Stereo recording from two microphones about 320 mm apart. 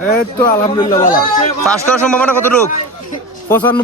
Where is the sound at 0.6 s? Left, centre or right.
Centre.